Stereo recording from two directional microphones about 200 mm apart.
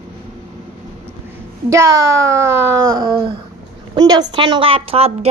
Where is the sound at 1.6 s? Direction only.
15° right (ahead or behind).